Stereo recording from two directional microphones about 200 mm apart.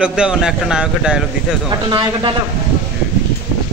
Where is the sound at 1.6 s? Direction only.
20° right (ahead or behind).